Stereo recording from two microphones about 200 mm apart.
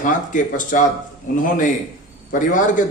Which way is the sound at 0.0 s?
40° left (ahead or behind).